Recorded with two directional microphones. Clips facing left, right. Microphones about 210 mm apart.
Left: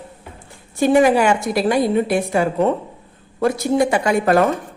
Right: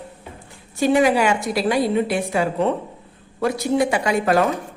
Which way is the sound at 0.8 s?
50° left (ahead or behind).